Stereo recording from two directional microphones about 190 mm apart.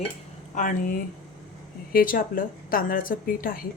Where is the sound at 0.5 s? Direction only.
45° left (ahead or behind).